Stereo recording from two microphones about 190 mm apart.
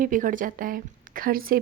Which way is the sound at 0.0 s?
45° right (ahead or behind).